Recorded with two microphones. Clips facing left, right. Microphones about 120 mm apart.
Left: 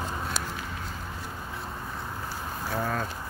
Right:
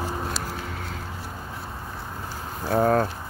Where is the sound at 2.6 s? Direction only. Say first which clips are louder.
Right 10 dB; 50° right (ahead or behind).